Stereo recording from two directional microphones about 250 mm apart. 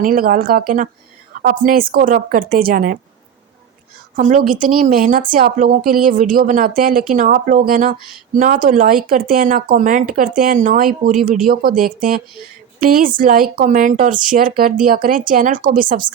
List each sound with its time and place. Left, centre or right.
0.0 s speech: right
4.1 s speech: right